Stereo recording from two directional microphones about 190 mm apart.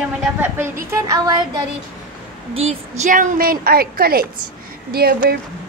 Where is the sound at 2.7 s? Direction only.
40° right (ahead or behind); by 5.4 s 55° right (ahead or behind).